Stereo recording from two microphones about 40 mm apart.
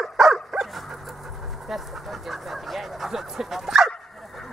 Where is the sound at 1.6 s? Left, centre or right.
Centre.